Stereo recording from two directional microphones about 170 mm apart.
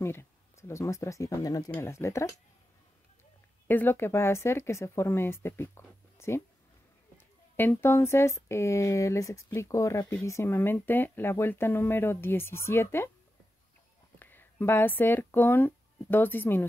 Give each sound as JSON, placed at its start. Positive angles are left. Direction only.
{"t": 0.0, "sound": "speech", "side_deg": 15}
{"t": 3.6, "sound": "speech", "side_deg": 10}
{"t": 14.2, "sound": "speech", "side_deg": 10}